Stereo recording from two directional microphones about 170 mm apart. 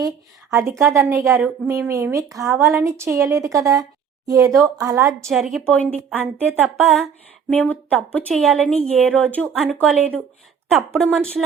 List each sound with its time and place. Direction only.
0.9 s a woman's voice: 15° right (ahead or behind)
5.3 s a woman's voice: centre (ahead or behind)
6.1 s a woman's voice: 10° right (ahead or behind)